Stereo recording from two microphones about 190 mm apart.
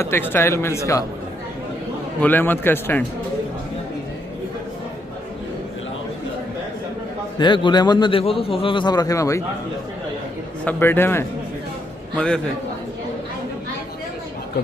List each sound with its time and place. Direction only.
0.0 s speech: 10° left (ahead or behind)
2.1 s speech: 10° left (ahead or behind)
7.3 s a man's voice: 25° left (ahead or behind)
10.6 s speech: 10° left (ahead or behind)